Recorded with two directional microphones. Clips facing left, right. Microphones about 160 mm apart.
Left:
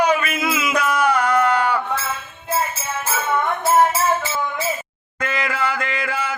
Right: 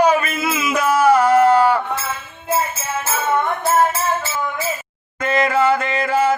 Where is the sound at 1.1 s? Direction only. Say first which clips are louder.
Right 8 dB; 30° right (ahead or behind).